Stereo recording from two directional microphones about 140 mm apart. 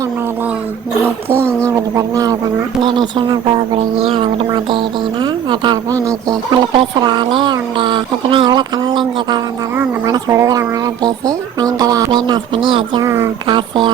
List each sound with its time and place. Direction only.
1.6 s speech: 25° right (ahead or behind)
2.8 s speech: 35° right (ahead or behind)
6.7 s speech: 35° right (ahead or behind)
10.1 s speech: 25° right (ahead or behind)